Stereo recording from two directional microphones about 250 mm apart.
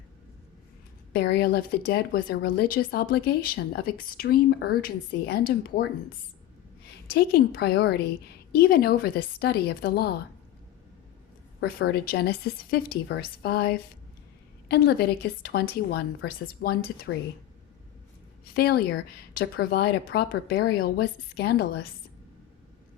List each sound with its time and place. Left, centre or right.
1.1 s a woman's voice: left
11.8 s a woman's voice: left
18.4 s a woman's voice: left